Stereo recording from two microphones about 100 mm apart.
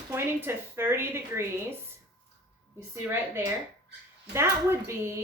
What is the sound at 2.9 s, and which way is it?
Speech, 25° right (ahead or behind).